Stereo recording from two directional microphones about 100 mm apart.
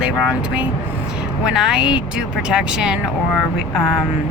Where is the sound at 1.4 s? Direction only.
5° right (ahead or behind).